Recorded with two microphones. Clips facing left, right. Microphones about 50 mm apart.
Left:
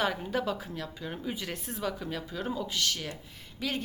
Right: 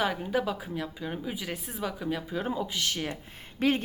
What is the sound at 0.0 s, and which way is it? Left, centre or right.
A woman's voice, centre.